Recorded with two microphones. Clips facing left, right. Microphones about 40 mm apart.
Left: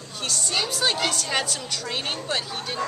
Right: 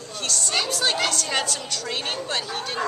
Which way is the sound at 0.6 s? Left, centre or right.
Centre.